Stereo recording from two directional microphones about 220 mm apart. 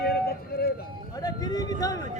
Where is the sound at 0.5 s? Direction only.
45° left (ahead or behind).